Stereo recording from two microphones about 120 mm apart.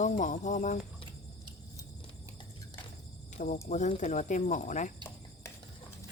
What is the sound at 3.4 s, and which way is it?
Speech, 90° left.